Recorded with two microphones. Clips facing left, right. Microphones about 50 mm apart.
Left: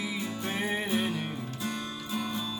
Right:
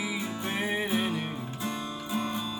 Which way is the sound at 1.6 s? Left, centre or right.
Right.